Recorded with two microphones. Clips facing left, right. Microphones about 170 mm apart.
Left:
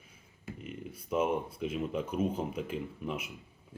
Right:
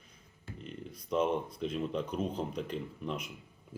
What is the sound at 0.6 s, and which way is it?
Speech, 5° left (ahead or behind).